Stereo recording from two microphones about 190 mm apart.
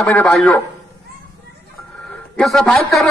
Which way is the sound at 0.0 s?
5° left (ahead or behind).